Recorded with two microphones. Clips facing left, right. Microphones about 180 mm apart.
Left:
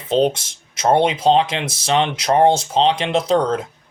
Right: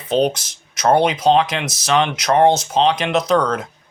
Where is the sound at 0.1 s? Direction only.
25° left (ahead or behind).